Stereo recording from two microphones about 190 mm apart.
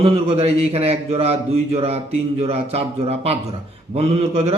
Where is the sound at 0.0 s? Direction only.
30° right (ahead or behind).